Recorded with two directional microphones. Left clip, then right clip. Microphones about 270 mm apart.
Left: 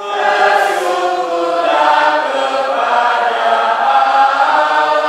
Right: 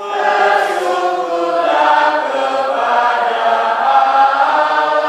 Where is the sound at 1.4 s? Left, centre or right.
Centre.